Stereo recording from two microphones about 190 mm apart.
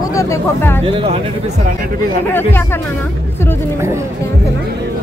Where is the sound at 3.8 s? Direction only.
15° right (ahead or behind).